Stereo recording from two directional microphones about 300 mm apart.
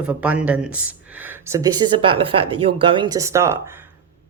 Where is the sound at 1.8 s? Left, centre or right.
Centre.